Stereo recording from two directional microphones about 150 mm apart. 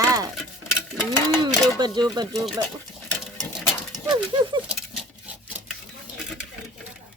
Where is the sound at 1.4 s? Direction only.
30° right (ahead or behind).